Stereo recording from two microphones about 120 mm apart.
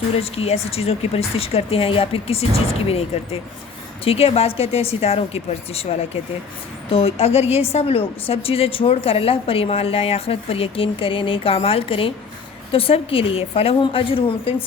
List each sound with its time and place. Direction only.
0.2 s a woman's voice: 55° left (ahead or behind)
4.0 s a woman's voice: 55° left (ahead or behind)
6.9 s a woman's voice: 55° left (ahead or behind)